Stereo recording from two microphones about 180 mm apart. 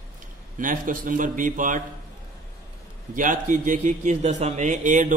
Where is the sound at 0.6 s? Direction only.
45° right (ahead or behind).